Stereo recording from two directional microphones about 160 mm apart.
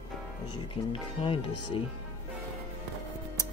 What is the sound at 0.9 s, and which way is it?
Speech, 35° left (ahead or behind).